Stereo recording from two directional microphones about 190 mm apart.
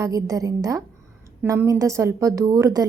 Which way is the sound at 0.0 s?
15° right (ahead or behind).